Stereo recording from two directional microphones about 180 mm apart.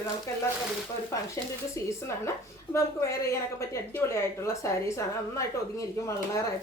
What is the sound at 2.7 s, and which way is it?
A woman's voice, 15° left (ahead or behind).